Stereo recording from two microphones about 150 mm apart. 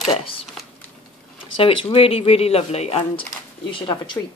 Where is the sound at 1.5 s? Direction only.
40° left (ahead or behind).